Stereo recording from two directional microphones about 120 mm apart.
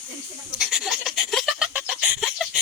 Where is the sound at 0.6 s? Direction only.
5° right (ahead or behind).